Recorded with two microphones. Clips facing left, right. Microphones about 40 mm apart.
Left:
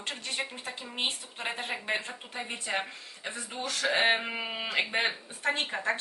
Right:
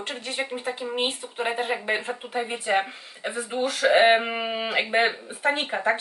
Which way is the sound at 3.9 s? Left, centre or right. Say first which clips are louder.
Right 8 dB; right.